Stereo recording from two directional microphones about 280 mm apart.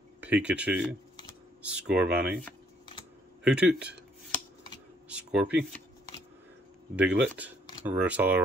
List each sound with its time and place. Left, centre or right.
0.2 s speech: centre
3.4 s a sound: centre
5.0 s speech: centre
7.0 s speech: centre